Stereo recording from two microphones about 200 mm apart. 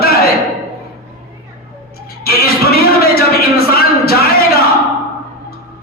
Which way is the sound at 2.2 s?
50° left (ahead or behind).